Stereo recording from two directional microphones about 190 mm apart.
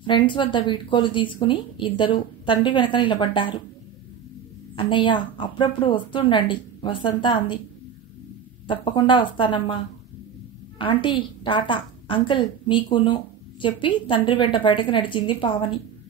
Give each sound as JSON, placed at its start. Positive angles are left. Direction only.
{"t": 0.0, "sound": "a woman's voice", "side_deg": 25}
{"t": 4.7, "sound": "a woman's voice", "side_deg": 25}
{"t": 8.6, "sound": "a woman's voice", "side_deg": 25}
{"t": 10.8, "sound": "a woman's voice", "side_deg": 25}